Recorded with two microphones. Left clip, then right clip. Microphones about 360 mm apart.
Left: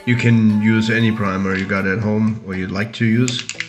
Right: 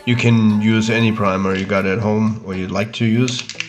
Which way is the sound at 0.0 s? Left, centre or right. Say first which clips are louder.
Even; centre.